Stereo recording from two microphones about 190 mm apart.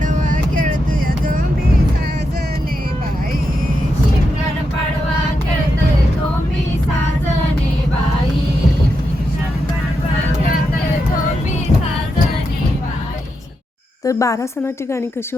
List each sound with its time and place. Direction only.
14.0 s a woman's voice: 15° left (ahead or behind)